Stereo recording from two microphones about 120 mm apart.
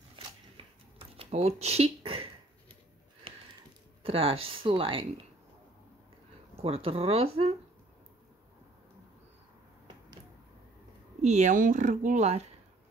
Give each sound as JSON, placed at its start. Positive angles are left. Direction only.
{"t": 0.9, "sound": "a sound", "side_deg": -55}
{"t": 4.0, "sound": "speech", "side_deg": -50}
{"t": 6.5, "sound": "speech", "side_deg": -55}
{"t": 11.2, "sound": "speech", "side_deg": -85}